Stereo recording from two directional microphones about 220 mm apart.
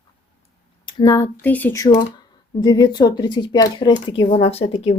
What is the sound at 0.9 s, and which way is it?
Speech, 20° left (ahead or behind).